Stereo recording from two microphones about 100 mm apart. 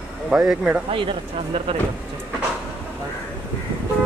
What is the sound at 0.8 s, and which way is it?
Speech, 70° right (ahead or behind).